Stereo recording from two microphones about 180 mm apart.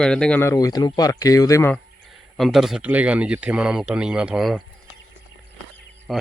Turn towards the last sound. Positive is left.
turn(degrees=0)  # may be behind; listen again after turning